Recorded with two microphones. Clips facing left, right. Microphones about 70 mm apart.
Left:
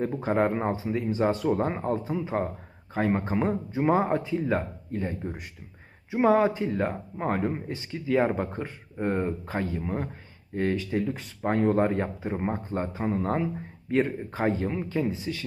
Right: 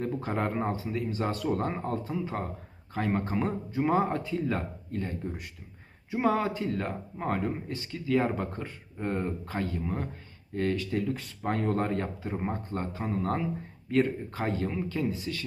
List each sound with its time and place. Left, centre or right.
0.0 s speech: left